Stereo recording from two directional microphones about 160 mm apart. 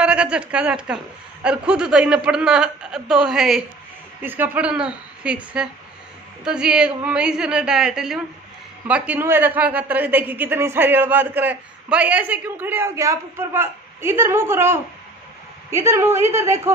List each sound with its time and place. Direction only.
0.0 s a woman's voice: 5° right (ahead or behind)